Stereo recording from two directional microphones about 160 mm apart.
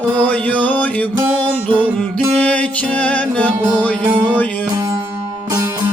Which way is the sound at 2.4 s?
10° left (ahead or behind).